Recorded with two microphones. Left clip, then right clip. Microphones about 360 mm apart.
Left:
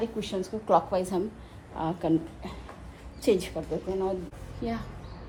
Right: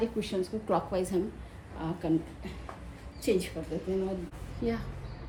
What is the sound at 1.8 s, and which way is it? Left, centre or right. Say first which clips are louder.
A woman's voice: left 4 dB; centre.